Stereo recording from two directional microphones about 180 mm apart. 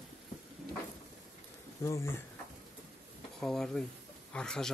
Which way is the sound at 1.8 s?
15° left (ahead or behind).